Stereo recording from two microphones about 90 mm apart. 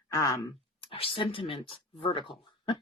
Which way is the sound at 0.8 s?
90° left.